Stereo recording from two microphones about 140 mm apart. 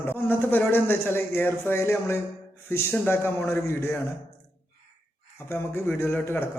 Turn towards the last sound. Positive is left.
turn(degrees=15)  # may be behind; listen again after turning